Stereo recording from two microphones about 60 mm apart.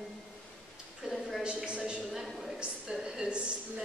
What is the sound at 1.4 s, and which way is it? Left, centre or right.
Speech, centre.